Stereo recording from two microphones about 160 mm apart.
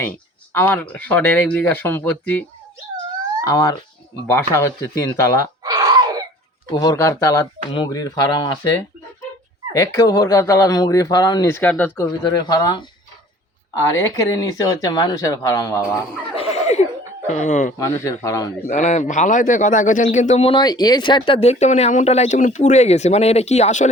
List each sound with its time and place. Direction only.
0.5 s speech: 10° left (ahead or behind)
3.4 s speech: 20° left (ahead or behind)
5.6 s a sound: 25° right (ahead or behind)
6.7 s speech: 25° left (ahead or behind)
11.7 s speech: 10° left (ahead or behind)
12.2 s speech: 25° left (ahead or behind)
13.9 s speech: 20° left (ahead or behind)
15.8 s speech: 10° right (ahead or behind)
16.3 s chuckle: 40° left (ahead or behind)
17.2 s a man's voice: 50° left (ahead or behind)
17.7 s speech: 20° left (ahead or behind)
18.7 s a man's voice: 45° left (ahead or behind)